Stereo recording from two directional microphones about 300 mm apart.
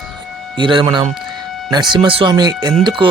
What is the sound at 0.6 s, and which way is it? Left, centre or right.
Speech, centre.